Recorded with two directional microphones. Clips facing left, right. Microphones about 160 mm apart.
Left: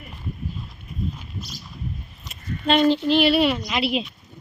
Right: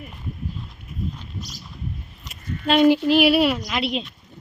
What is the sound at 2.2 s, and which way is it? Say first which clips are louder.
A woman's voice: left 1 dB; 10° right (ahead or behind).